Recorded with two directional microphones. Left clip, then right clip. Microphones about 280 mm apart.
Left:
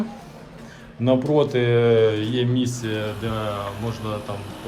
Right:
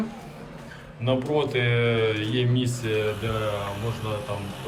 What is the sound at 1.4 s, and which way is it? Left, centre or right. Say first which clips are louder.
Speech: left 5 dB; centre.